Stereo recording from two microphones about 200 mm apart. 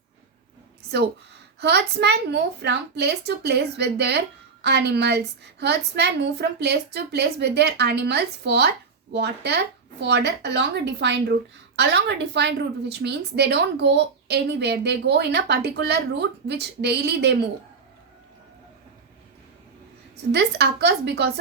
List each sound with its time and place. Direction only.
1.5 s a woman's voice: 55° right (ahead or behind)
20.3 s a woman's voice: 55° right (ahead or behind)